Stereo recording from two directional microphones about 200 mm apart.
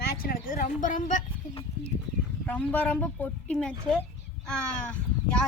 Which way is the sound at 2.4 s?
10° left (ahead or behind).